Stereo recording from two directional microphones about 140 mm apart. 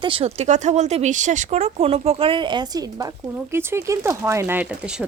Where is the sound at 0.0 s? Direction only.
40° right (ahead or behind).